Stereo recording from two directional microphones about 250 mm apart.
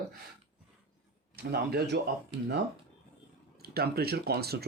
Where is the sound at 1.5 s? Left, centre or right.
Right.